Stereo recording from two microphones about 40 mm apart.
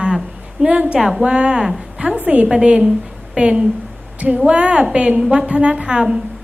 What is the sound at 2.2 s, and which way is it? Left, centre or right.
Speech, right.